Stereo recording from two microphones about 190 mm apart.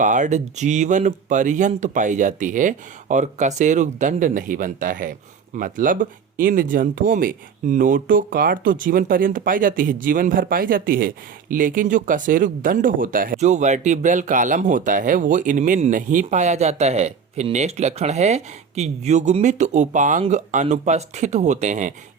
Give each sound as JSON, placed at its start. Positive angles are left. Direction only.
{"t": 0.0, "sound": "speech", "side_deg": -40}